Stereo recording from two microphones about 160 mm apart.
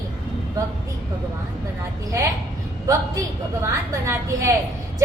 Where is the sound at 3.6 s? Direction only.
15° right (ahead or behind).